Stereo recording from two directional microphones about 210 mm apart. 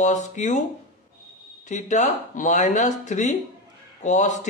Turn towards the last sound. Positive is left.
turn(degrees=35)  # may be behind; listen again after turning